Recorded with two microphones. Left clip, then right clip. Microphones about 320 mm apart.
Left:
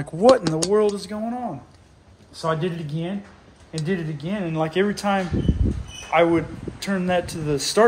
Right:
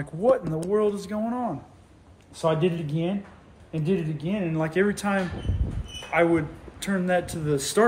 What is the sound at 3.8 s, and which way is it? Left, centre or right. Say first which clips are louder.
Speech: even; centre.